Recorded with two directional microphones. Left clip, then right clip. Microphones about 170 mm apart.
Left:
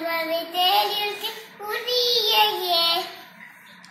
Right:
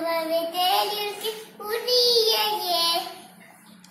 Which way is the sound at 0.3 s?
20° right (ahead or behind).